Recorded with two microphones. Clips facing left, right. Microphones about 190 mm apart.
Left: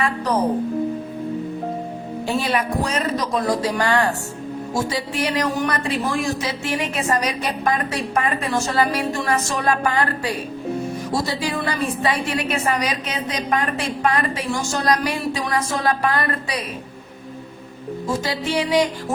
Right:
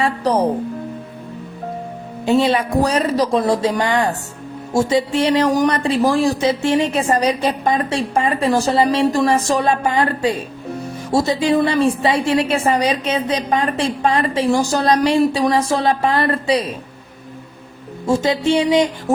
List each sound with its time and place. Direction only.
0.0 s speech: 30° right (ahead or behind)
2.2 s a woman's voice: 25° right (ahead or behind)
18.0 s a woman's voice: 25° right (ahead or behind)